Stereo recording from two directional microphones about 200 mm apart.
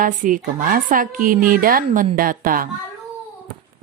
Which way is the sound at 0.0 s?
40° right (ahead or behind).